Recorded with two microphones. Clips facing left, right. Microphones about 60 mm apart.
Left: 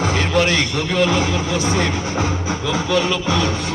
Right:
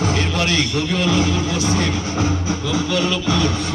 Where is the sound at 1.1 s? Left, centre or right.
Centre.